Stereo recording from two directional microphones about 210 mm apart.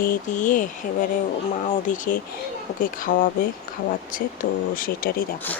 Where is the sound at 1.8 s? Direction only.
40° left (ahead or behind).